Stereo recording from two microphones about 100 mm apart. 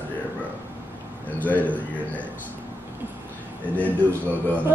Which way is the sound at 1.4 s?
15° left (ahead or behind).